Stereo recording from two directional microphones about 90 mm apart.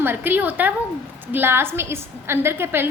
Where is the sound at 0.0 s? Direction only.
25° right (ahead or behind).